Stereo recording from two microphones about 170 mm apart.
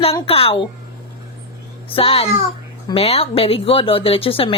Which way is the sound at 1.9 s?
35° left (ahead or behind).